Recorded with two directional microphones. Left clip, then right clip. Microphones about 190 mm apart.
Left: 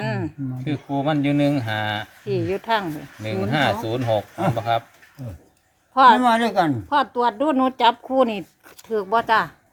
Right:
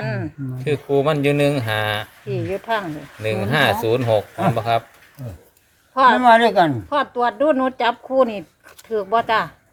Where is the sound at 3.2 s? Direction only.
55° right (ahead or behind).